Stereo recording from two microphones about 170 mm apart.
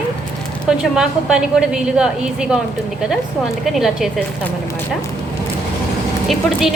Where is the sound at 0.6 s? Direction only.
5° right (ahead or behind).